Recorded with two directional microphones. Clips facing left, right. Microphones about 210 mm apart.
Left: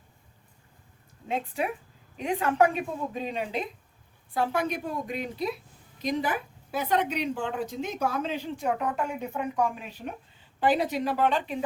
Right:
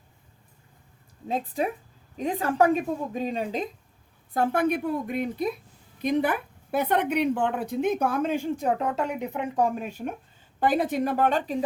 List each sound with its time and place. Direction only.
1.3 s a woman's voice: 35° right (ahead or behind)
4.4 s a woman's voice: 55° right (ahead or behind)
8.6 s a woman's voice: 25° right (ahead or behind)
9.6 s a woman's voice: 40° right (ahead or behind)